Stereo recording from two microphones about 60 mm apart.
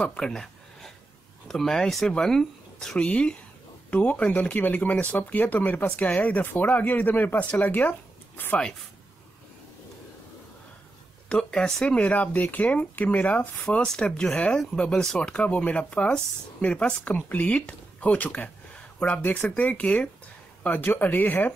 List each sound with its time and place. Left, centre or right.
0.0 s a sound: centre
1.5 s speech: centre; by 7.9 s left
11.2 s speech: centre; by 13.7 s left
13.7 s speech: centre
20.6 s speech: left